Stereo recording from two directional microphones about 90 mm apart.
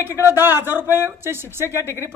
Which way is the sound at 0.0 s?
25° right (ahead or behind).